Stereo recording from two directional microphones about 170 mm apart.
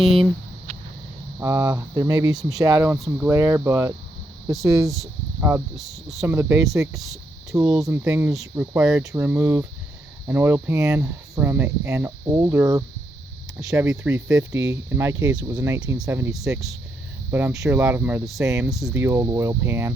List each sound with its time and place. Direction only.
0.0 s speech: centre (ahead or behind)
1.4 s speech: 15° right (ahead or behind)
2.3 s speech: 5° right (ahead or behind)
2.6 s speech: 20° right (ahead or behind)
4.5 s speech: centre (ahead or behind)
5.4 s speech: 15° right (ahead or behind)
5.7 s speech: centre (ahead or behind)
6.2 s speech: 15° right (ahead or behind)
6.9 s speech: centre (ahead or behind)
7.5 s speech: 20° right (ahead or behind)
17.3 s speech: 15° right (ahead or behind)
18.7 s speech: centre (ahead or behind)
18.9 s speech: 15° right (ahead or behind)